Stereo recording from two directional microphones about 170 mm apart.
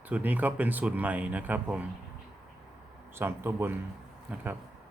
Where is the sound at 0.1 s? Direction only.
10° right (ahead or behind).